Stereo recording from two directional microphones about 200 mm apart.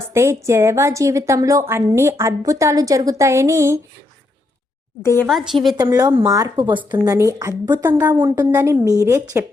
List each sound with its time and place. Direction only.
0.1 s a woman's voice: 15° right (ahead or behind)
5.2 s a woman's voice: centre (ahead or behind)
5.7 s a woman's voice: 20° right (ahead or behind)